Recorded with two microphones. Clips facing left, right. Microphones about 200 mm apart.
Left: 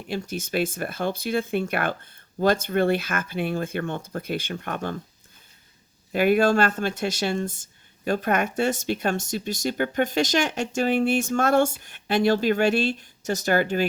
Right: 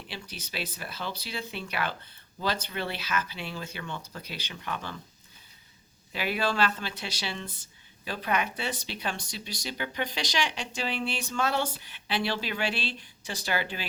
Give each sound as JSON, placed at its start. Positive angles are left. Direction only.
{"t": 0.1, "sound": "speech", "side_deg": 45}
{"t": 6.1, "sound": "speech", "side_deg": 50}